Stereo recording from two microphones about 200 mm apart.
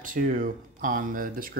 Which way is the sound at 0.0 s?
45° right (ahead or behind).